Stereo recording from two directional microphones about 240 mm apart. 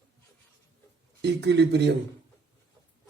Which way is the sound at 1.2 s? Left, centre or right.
Right.